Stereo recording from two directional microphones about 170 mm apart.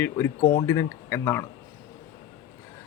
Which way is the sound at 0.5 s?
20° left (ahead or behind).